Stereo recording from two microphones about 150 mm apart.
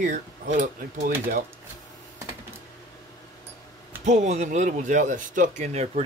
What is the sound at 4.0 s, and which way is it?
Speech, 50° right (ahead or behind).